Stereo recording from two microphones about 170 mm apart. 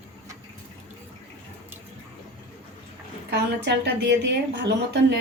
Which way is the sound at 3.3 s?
90° right.